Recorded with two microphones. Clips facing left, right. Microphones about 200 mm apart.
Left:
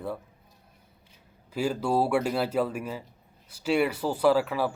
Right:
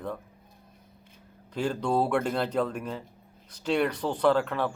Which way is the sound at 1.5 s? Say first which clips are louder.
Left 1 dB; 5° left (ahead or behind).